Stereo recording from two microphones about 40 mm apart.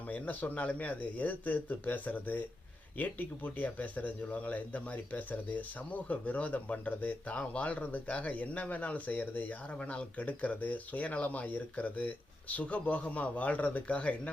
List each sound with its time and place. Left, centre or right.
0.1 s speech: left
9.8 s speech: left